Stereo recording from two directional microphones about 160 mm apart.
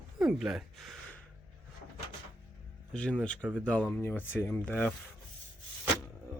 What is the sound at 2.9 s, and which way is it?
Speech, 5° left (ahead or behind).